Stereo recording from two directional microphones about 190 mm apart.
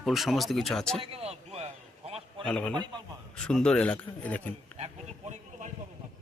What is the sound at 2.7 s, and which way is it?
Speech, 20° right (ahead or behind).